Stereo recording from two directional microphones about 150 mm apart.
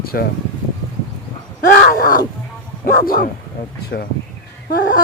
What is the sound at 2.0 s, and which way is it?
Speech, 70° left (ahead or behind).